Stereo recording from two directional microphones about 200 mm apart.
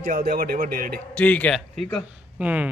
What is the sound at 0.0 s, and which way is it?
A man's voice, 45° right (ahead or behind).